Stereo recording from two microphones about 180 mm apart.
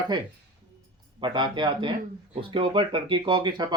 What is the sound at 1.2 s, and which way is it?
Speech, 25° right (ahead or behind).